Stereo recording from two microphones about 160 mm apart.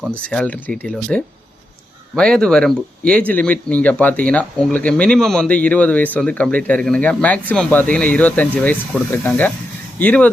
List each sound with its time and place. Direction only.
0.3 s speech: 10° left (ahead or behind)